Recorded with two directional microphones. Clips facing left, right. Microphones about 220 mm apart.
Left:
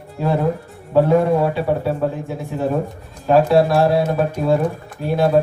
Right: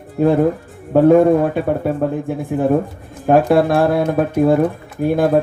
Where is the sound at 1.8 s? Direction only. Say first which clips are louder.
Right 2 dB; 55° right (ahead or behind).